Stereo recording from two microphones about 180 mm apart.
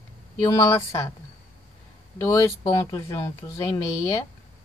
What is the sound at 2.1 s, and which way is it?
Speech, 15° left (ahead or behind).